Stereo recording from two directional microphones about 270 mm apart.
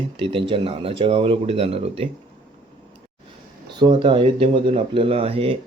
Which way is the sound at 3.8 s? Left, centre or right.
Centre.